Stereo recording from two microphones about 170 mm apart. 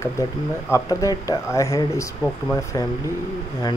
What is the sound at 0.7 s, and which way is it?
Speech, 20° left (ahead or behind).